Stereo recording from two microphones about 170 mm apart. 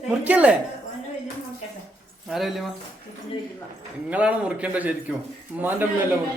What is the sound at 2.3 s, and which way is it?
Speech, centre (ahead or behind).